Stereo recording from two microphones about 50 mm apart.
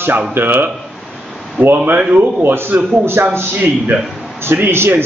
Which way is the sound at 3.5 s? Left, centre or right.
Right.